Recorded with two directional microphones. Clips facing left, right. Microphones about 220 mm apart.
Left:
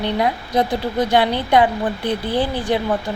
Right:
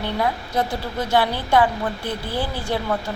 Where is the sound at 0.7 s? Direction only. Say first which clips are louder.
Left 6 dB; 5° right (ahead or behind).